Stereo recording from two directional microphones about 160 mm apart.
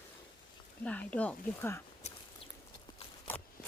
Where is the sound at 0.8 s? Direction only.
10° left (ahead or behind).